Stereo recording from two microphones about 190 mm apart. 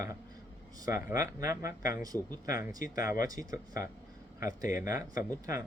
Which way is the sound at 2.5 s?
45° left (ahead or behind).